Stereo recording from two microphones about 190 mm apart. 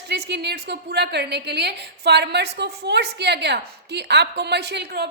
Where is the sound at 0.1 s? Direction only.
60° right (ahead or behind).